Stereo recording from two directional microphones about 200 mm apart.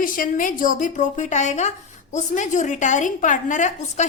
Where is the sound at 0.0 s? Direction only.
45° left (ahead or behind).